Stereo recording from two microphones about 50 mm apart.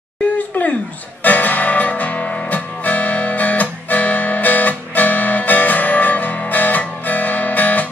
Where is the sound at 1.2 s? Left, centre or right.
Left.